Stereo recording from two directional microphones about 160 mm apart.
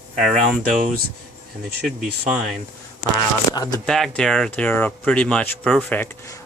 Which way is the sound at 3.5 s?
25° left (ahead or behind).